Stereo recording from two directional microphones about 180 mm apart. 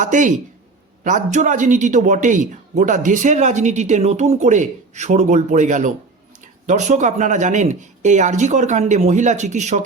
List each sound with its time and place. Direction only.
0.0 s a man's voice: 45° right (ahead or behind)